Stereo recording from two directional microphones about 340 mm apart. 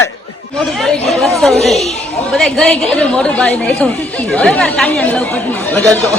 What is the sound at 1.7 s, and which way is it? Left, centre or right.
Speech, centre.